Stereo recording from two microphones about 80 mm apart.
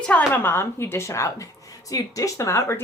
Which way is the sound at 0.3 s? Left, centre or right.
Left.